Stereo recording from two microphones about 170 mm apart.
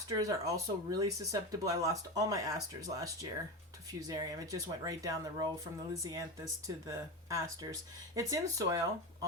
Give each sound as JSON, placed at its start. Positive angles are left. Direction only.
{"t": 0.2, "sound": "speech", "side_deg": -20}